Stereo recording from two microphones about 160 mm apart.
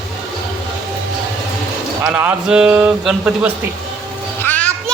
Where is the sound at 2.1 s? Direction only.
5° right (ahead or behind).